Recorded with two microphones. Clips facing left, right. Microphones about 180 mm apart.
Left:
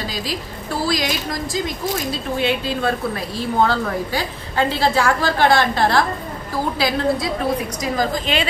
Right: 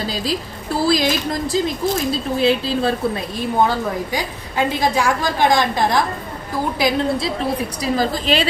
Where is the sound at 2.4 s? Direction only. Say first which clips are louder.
Right 3 dB; 35° right (ahead or behind).